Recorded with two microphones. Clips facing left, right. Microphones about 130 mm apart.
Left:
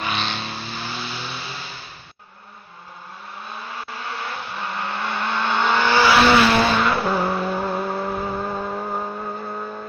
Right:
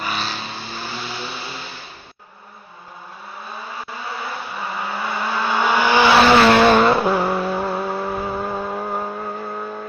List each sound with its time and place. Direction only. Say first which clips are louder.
0.0 s vehicle: even; 5° right (ahead or behind)
3.9 s vehicle: right 1 dB; 5° right (ahead or behind)
6.5 s vehicle: right 6 dB; 65° right (ahead or behind)
7.0 s vehicle: right 3 dB; 10° right (ahead or behind)